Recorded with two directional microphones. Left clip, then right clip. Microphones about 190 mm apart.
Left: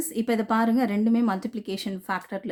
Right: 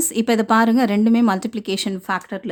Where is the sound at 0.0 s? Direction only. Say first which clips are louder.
Right 7 dB; 35° right (ahead or behind).